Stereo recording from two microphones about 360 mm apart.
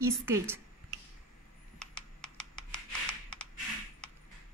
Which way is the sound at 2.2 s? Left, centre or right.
Centre.